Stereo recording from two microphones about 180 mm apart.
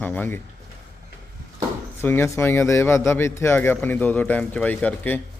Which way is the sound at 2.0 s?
15° left (ahead or behind).